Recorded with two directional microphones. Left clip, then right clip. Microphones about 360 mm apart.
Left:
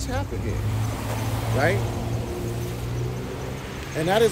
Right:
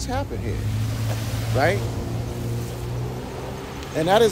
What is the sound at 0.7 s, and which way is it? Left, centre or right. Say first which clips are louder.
Vehicle: left 1 dB; centre.